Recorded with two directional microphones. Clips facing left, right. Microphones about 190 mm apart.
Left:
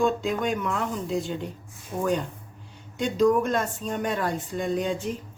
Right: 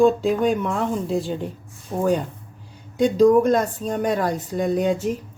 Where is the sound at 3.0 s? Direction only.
35° right (ahead or behind).